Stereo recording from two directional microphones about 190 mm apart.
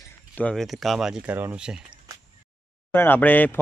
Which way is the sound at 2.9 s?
10° left (ahead or behind).